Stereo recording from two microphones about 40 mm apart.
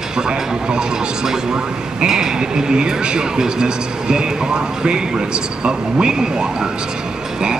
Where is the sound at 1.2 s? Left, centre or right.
Centre.